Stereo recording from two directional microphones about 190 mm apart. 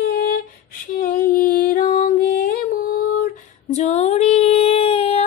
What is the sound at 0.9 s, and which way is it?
Music, 45° left (ahead or behind).